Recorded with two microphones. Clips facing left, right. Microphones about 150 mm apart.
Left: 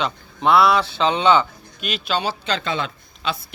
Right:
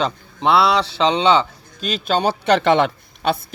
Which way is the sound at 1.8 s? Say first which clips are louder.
Right 5 dB; 45° right (ahead or behind).